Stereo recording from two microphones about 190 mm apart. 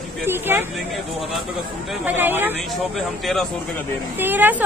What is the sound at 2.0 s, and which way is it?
Speech, 10° right (ahead or behind).